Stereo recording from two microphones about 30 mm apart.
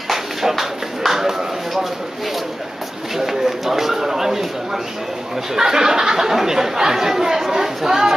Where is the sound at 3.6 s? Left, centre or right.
Centre.